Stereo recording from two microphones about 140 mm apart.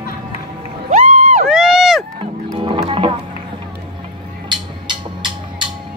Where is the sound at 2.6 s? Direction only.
40° right (ahead or behind).